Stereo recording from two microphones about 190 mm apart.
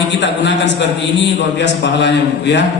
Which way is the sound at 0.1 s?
70° left (ahead or behind).